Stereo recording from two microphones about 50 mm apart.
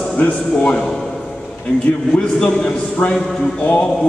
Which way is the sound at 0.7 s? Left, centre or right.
Centre.